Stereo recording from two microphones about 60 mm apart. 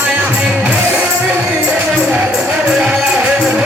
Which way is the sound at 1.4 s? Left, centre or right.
Right.